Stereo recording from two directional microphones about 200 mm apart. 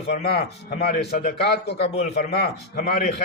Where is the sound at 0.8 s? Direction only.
50° left (ahead or behind).